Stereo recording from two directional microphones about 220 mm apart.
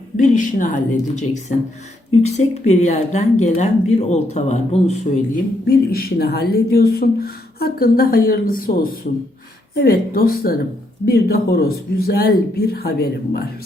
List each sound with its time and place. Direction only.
0.2 s speech: 35° left (ahead or behind)
5.6 s speech: 45° left (ahead or behind)